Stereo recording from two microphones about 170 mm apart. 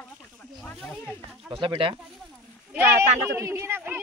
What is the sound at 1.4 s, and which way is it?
Speech, 30° right (ahead or behind).